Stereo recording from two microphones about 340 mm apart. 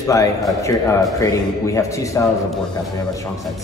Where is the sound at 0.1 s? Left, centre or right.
Centre.